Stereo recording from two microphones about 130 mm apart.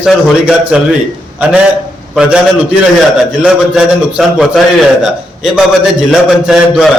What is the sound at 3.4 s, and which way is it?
A man's voice, 5° right (ahead or behind).